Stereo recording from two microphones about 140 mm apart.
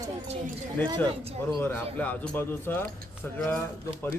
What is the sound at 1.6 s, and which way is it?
Speech, 15° left (ahead or behind).